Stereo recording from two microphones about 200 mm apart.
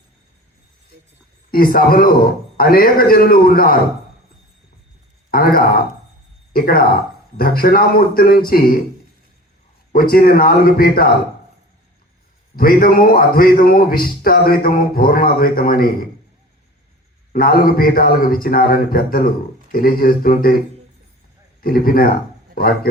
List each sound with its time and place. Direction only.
1.5 s a man's voice: 45° left (ahead or behind)
5.3 s a man's voice: 45° left (ahead or behind)
9.9 s a man's voice: 50° left (ahead or behind)
12.5 s a man's voice: 45° left (ahead or behind)
17.3 s a man's voice: 45° left (ahead or behind)
21.6 s a man's voice: 45° left (ahead or behind)